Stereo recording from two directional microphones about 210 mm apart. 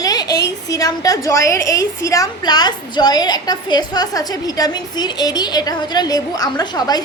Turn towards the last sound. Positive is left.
turn(degrees=20)  # may be behind; listen again after turning